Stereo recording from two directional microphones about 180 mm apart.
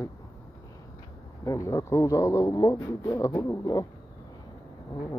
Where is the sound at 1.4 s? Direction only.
15° left (ahead or behind).